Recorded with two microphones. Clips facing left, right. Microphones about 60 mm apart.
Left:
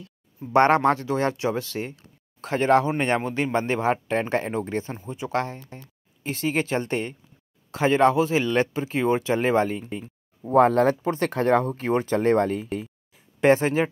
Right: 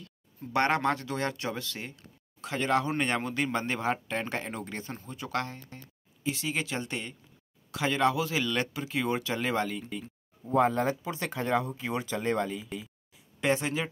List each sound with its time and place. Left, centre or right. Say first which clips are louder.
0.0 s speech: left 5 dB; left
4.9 s speech: left 7 dB; centre
5.3 s speech: left 6 dB; left
10.4 s speech: left 8 dB; left
13.4 s speech: left 9 dB; left